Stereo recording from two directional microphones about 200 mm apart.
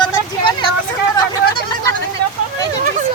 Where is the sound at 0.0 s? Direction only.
25° left (ahead or behind).